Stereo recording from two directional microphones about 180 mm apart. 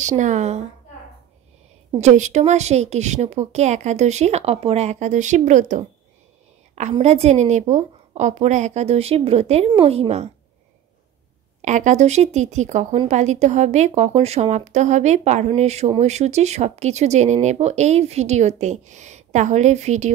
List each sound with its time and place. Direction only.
0.0 s speech: 40° right (ahead or behind)
2.0 s speech: 40° right (ahead or behind)
11.6 s speech: 40° right (ahead or behind)